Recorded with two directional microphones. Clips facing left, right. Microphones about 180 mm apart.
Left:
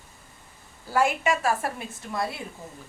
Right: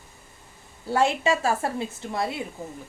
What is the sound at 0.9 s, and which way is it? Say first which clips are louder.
A woman's voice: right 2 dB; 30° right (ahead or behind).